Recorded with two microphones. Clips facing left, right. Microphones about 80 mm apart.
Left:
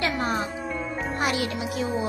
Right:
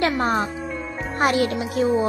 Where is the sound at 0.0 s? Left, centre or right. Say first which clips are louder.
Right 5 dB; right.